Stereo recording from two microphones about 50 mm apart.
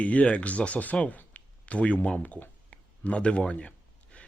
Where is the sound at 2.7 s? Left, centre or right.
Left.